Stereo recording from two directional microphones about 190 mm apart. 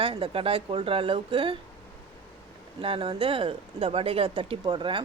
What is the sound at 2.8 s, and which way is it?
Speech, 30° right (ahead or behind).